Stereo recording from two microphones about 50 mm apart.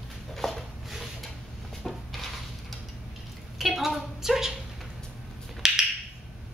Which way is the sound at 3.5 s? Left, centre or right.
Centre.